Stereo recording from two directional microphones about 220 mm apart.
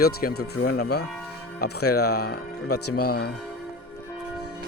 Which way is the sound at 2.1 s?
45° left (ahead or behind).